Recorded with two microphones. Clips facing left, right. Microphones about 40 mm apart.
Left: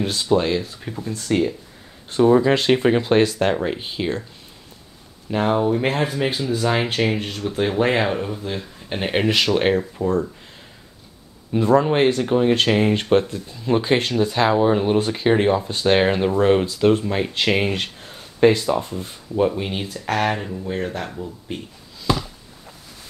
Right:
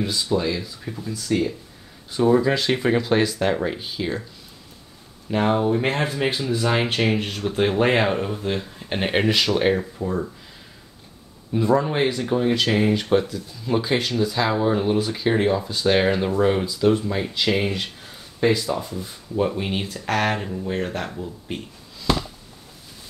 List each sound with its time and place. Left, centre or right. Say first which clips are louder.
0.0 s speech: left 3 dB; left
2.4 s speech: left 4 dB; left
5.3 s speech: left 1 dB; centre
7.3 s speech: even; centre
9.3 s speech: left 3 dB; centre
10.0 s speech: left 5 dB; left
11.5 s speech: left 3 dB; left
13.3 s speech: left 3 dB; left
15.0 s speech: left 3 dB; left
15.2 s speech: left 3 dB; left
15.6 s speech: left 2 dB; left
16.7 s speech: left 2 dB; left
19.3 s speech: left 2 dB; centre